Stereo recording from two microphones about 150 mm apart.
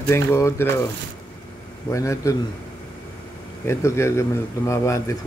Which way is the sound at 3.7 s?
20° left (ahead or behind).